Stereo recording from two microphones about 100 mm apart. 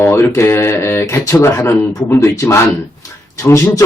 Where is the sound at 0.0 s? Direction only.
25° left (ahead or behind).